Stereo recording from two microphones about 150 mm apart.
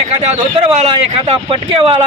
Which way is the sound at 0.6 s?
40° right (ahead or behind).